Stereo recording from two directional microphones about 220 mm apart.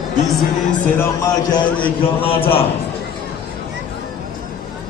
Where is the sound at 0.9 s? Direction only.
15° left (ahead or behind).